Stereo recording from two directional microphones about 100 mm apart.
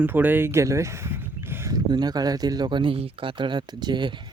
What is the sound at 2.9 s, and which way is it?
Speech, 65° right (ahead or behind).